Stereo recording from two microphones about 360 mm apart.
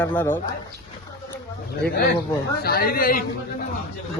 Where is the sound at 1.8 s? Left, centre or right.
Left.